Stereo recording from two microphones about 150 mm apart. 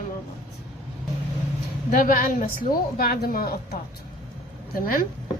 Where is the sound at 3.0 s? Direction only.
80° left.